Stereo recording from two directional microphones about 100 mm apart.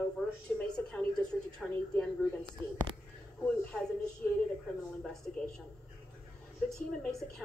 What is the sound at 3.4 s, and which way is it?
A woman's voice, 10° left (ahead or behind).